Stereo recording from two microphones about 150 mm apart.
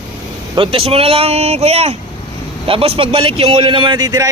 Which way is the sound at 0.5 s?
40° right (ahead or behind).